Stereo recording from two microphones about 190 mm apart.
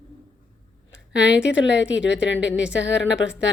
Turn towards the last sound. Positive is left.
turn(degrees=70)  # may be behind; listen again after turning